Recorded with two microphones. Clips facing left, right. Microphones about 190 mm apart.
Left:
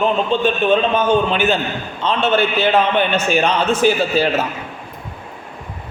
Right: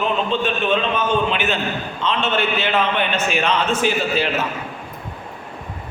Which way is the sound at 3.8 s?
40° left (ahead or behind).